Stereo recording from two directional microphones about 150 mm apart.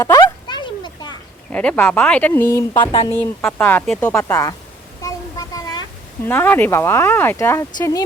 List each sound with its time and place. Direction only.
0.0 s a sound: 25° left (ahead or behind)
1.5 s speech: 10° left (ahead or behind)
2.7 s speech: 35° left (ahead or behind)
3.4 s speech: 10° left (ahead or behind)
4.2 s speech: 20° left (ahead or behind)
5.0 s a sound: 25° left (ahead or behind)
6.2 s speech: 10° left (ahead or behind)